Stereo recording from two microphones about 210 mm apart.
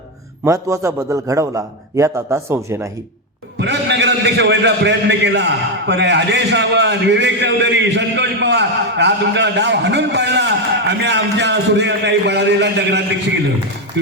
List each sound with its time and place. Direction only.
0.4 s a man's voice: 15° right (ahead or behind)
3.6 s a man's voice: 55° right (ahead or behind)